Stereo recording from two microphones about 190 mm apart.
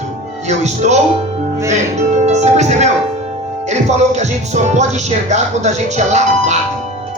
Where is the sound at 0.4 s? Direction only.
35° right (ahead or behind).